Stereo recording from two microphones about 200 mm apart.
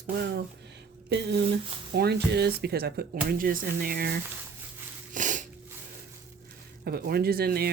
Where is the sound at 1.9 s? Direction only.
55° right (ahead or behind).